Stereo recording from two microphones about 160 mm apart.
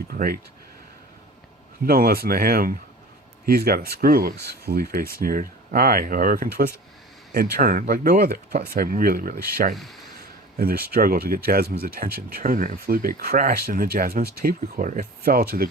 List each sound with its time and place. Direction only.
0.1 s a sound: 70° right (ahead or behind)
1.8 s speech: 65° right (ahead or behind)
9.7 s speech: centre (ahead or behind)
10.6 s speech: 70° right (ahead or behind)